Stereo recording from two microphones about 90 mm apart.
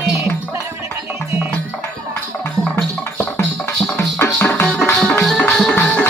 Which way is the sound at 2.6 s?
5° left (ahead or behind).